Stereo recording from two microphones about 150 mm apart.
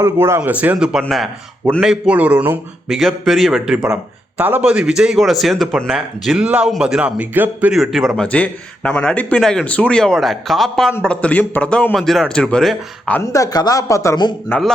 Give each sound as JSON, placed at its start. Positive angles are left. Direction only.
{"t": 0.0, "sound": "a man's voice", "side_deg": -15}
{"t": 13.3, "sound": "speech", "side_deg": 25}